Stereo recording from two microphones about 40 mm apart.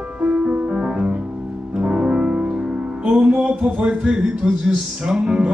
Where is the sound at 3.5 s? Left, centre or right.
Right.